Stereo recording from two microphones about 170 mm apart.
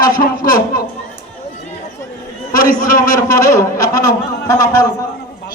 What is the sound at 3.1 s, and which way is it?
A man's voice, 20° left (ahead or behind).